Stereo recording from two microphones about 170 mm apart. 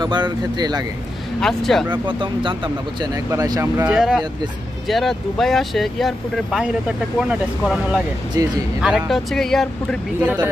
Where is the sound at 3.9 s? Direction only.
5° right (ahead or behind).